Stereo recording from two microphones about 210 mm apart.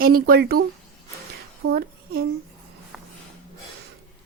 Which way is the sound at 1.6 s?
45° right (ahead or behind).